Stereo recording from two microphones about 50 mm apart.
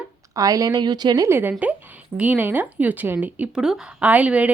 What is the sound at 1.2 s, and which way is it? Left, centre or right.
Speech, right.